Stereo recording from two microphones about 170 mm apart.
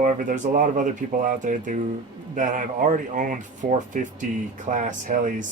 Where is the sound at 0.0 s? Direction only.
50° right (ahead or behind).